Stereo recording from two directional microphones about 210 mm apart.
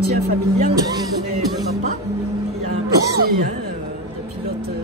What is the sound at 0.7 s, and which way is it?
Speech, 15° right (ahead or behind).